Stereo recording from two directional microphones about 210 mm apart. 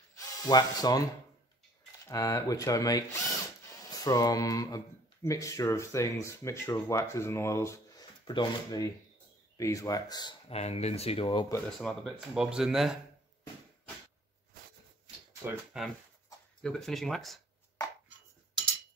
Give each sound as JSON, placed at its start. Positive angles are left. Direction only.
{"t": 0.4, "sound": "speech", "side_deg": 20}
{"t": 2.0, "sound": "speech", "side_deg": 15}
{"t": 10.5, "sound": "speech", "side_deg": 30}
{"t": 11.8, "sound": "speech", "side_deg": 0}
{"t": 15.4, "sound": "speech", "side_deg": -5}